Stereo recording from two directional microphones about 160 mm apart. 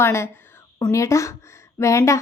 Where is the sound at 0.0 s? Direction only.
15° left (ahead or behind).